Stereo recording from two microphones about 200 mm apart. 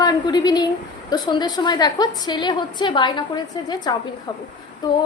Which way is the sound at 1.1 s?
20° left (ahead or behind).